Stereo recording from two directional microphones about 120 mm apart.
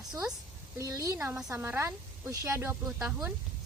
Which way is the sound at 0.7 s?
30° right (ahead or behind).